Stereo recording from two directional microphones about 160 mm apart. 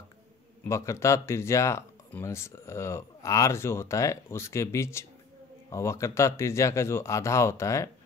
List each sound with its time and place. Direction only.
0.7 s speech: 15° left (ahead or behind)